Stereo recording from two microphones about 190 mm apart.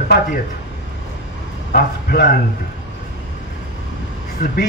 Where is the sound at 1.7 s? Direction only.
50° left (ahead or behind).